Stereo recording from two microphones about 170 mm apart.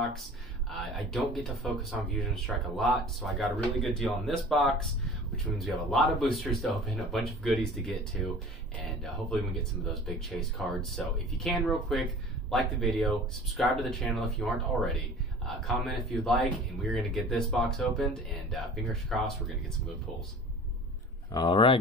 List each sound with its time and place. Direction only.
0.7 s speech: centre (ahead or behind)
21.3 s speech: 25° left (ahead or behind)